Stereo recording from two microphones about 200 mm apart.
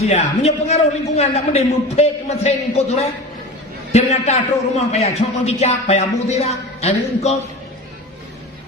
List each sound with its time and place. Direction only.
0.0 s a man's voice: 30° left (ahead or behind)